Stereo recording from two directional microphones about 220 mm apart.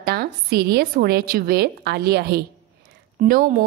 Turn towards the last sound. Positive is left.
turn(degrees=-40)  # may be behind; listen again after turning